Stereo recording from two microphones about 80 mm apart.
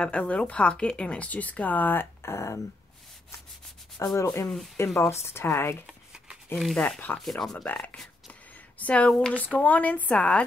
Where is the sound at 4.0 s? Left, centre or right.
Left.